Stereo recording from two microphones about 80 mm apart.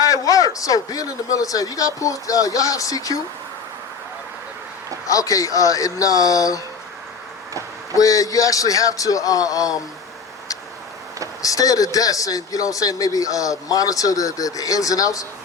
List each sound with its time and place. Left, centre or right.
0.0 s speech: left
5.0 s speech: left
7.9 s speech: left
11.4 s speech: left